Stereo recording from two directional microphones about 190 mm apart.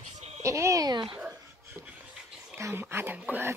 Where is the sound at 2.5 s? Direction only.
15° right (ahead or behind).